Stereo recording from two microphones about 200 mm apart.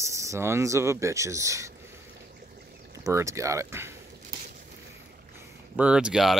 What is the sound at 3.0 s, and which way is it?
Speech, 15° right (ahead or behind).